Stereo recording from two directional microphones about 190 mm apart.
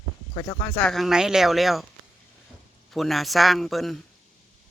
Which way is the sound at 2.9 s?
Centre (ahead or behind).